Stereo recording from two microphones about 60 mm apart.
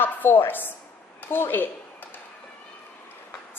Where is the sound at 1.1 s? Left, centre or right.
Left.